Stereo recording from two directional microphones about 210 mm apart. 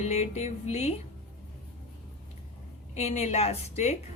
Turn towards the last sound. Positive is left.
turn(degrees=30)  # may be behind; listen again after turning